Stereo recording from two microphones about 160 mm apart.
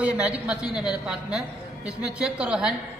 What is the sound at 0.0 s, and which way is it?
A woman's voice, 10° right (ahead or behind).